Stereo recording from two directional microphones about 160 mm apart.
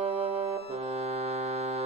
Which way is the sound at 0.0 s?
40° right (ahead or behind).